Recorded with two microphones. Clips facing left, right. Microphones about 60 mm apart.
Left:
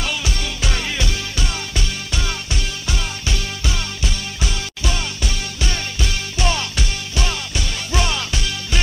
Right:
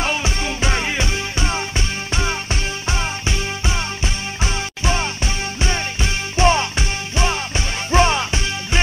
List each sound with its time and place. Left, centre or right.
0.0 s music: right
2.9 s music: right